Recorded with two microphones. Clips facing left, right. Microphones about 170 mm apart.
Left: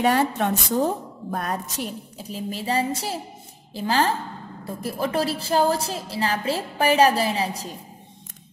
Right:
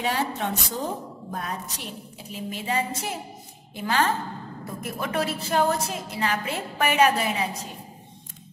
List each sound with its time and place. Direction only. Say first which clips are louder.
0.0 s a woman's voice: left 6 dB; 50° left (ahead or behind); by 7.7 s 35° left (ahead or behind)